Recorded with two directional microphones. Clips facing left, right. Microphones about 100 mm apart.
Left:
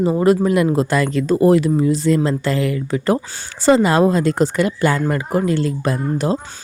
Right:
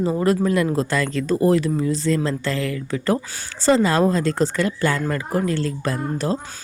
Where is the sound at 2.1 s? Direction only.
25° left (ahead or behind).